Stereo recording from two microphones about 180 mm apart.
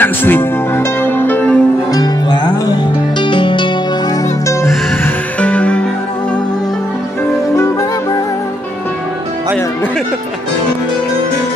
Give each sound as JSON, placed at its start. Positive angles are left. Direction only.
{"t": 0.0, "sound": "music", "side_deg": 10}
{"t": 1.9, "sound": "music", "side_deg": 25}
{"t": 5.0, "sound": "music", "side_deg": 5}